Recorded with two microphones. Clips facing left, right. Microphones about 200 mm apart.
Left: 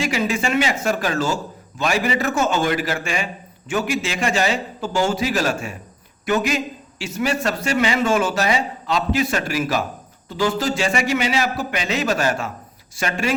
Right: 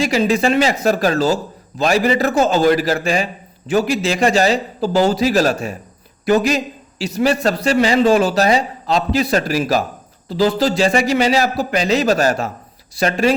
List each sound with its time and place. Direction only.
0.0 s a man's voice: 35° right (ahead or behind)